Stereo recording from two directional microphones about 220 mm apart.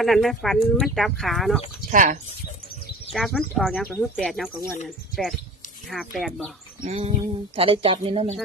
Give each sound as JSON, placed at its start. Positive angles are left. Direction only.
{"t": 0.0, "sound": "speech", "side_deg": 0}
{"t": 1.9, "sound": "speech", "side_deg": -35}
{"t": 3.2, "sound": "speech", "side_deg": 0}
{"t": 6.8, "sound": "speech", "side_deg": -30}